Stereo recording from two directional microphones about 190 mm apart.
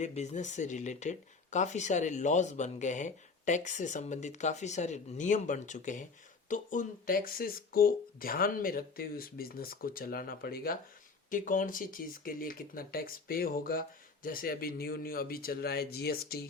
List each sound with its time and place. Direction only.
0.0 s speech: 35° left (ahead or behind); by 16.5 s 55° left (ahead or behind)